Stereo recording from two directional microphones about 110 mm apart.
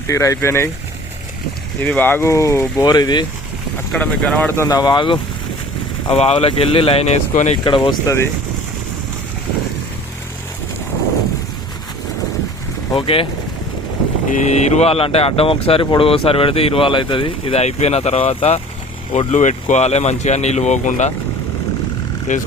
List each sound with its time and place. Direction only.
0.1 s speech: 30° left (ahead or behind)
1.8 s speech: 20° left (ahead or behind)
2.8 s speech: 40° left (ahead or behind)
3.9 s speech: 10° left (ahead or behind)
4.5 s speech: 25° left (ahead or behind)
4.8 s speech: 45° left (ahead or behind)
6.1 s speech: 70° left (ahead or behind); by 7.6 s 90° left
7.6 s speech: 45° left (ahead or behind)
8.0 s speech: 25° left (ahead or behind)
12.9 s speech: 55° left (ahead or behind)
14.4 s speech: 90° left
19.3 s speech: 90° left